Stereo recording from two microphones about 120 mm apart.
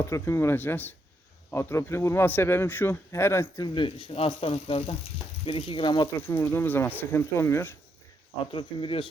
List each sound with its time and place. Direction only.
0.0 s a man's voice: 20° left (ahead or behind)
3.6 s speech: 45° left (ahead or behind)
6.1 s a man's voice: 20° left (ahead or behind)
8.5 s speech: 45° left (ahead or behind)